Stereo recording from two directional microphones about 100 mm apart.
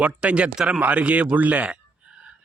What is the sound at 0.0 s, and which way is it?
A man's voice, 10° right (ahead or behind).